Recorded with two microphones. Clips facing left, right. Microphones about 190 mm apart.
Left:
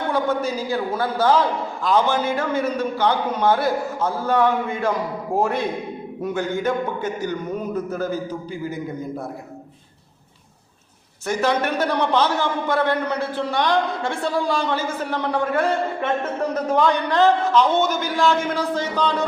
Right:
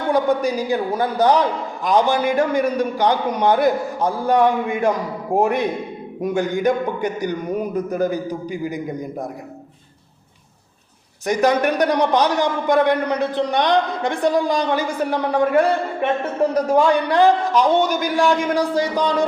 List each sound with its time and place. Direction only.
0.1 s a man's voice: 15° right (ahead or behind)
11.3 s a man's voice: 15° right (ahead or behind)